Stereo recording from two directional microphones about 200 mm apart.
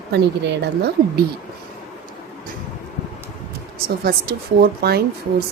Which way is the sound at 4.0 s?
50° right (ahead or behind).